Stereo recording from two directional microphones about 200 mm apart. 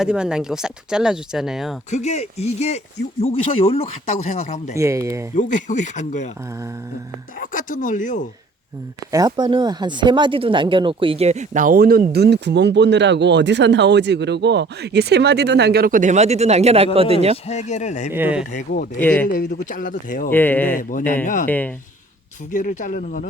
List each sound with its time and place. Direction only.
0.0 s speech: 5° right (ahead or behind)
1.9 s speech: 35° left (ahead or behind)
4.7 s speech: 15° right (ahead or behind)
5.4 s speech: 40° left (ahead or behind)
7.4 s speech: 40° left (ahead or behind)
9.1 s speech: 20° right (ahead or behind)
17.3 s speech: 35° left (ahead or behind)
18.1 s speech: 10° right (ahead or behind)
18.5 s speech: 50° left (ahead or behind)
18.9 s speech: 10° left (ahead or behind)
19.3 s speech: 40° left (ahead or behind)
20.3 s speech: 10° left (ahead or behind)
22.5 s speech: 40° left (ahead or behind)